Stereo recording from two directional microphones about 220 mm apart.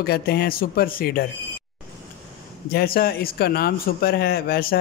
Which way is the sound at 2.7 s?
45° left (ahead or behind).